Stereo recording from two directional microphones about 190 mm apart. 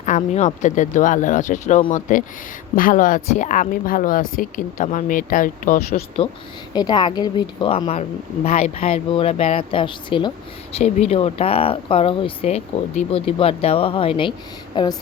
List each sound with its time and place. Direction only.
0.0 s speech: 40° left (ahead or behind)
6.2 s a woman's voice: 30° left (ahead or behind)